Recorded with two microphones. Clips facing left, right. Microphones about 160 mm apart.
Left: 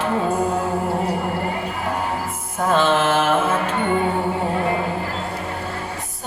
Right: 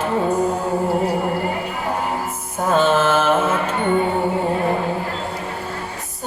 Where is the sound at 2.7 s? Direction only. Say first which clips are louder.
Right 2 dB; 40° right (ahead or behind).